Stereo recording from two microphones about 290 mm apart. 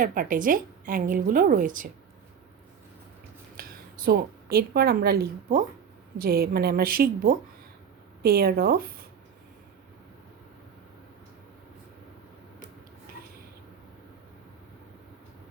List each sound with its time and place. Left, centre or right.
0.0 s a woman's voice: right
3.6 s a woman's voice: right